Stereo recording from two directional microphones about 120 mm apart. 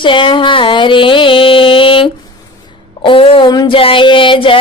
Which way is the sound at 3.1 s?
45° left (ahead or behind).